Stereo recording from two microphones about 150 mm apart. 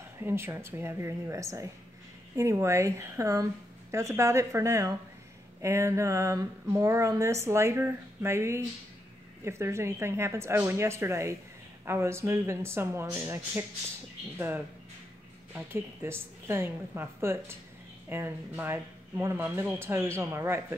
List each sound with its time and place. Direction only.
0.2 s speech: 15° right (ahead or behind)
15.5 s speech: 15° right (ahead or behind)